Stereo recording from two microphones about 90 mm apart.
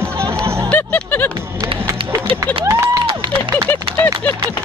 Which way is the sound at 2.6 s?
35° right (ahead or behind).